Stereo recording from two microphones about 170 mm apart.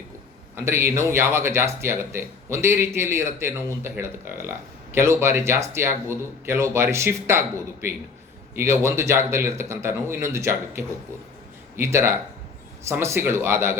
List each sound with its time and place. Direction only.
0.5 s speech: 15° right (ahead or behind)